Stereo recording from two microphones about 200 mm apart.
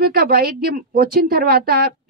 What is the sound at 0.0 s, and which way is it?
A woman's voice, 50° right (ahead or behind).